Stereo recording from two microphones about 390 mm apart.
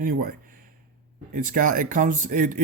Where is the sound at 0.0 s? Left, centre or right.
Right.